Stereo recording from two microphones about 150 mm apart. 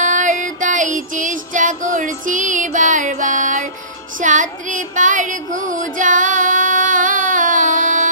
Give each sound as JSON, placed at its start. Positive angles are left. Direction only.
{"t": 0.0, "sound": "music", "side_deg": -55}